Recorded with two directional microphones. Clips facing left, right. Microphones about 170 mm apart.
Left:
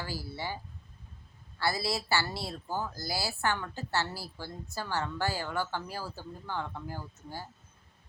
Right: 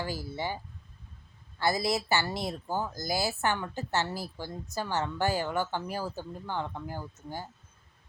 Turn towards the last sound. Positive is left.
turn(degrees=-20)  # may be behind; listen again after turning